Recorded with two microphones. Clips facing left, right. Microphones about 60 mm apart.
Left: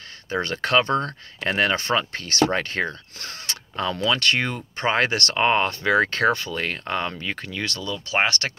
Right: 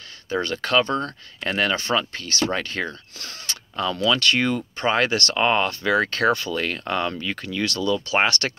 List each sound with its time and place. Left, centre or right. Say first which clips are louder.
0.3 s speech: even; left
2.1 s speech: even; left
2.5 s speech: left 2 dB; left
5.3 s speech: even; left